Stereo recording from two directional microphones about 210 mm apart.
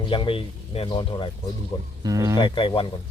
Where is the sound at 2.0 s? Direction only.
15° right (ahead or behind).